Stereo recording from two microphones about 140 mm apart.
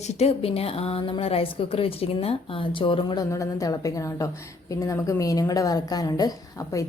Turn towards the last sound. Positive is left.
turn(degrees=25)  # may be behind; listen again after turning